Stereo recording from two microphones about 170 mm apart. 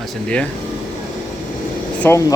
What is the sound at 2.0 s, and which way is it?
Speech, 15° left (ahead or behind).